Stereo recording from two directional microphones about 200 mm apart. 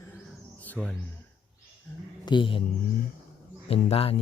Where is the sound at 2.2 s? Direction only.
25° left (ahead or behind).